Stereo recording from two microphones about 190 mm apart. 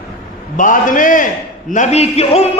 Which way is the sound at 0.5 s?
45° left (ahead or behind).